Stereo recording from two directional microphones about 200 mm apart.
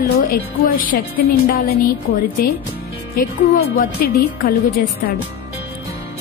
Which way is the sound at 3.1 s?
45° left (ahead or behind).